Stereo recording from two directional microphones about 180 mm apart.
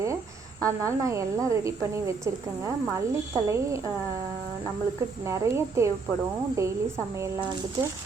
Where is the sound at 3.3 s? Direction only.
15° right (ahead or behind).